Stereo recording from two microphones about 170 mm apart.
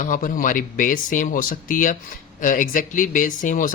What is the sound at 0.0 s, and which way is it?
Speech, 50° left (ahead or behind).